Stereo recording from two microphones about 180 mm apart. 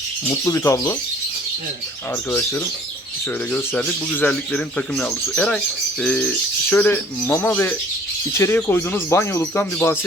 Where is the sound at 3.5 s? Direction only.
10° left (ahead or behind).